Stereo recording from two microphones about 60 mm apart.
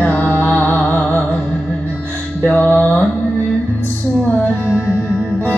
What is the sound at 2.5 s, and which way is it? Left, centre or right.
Music, left.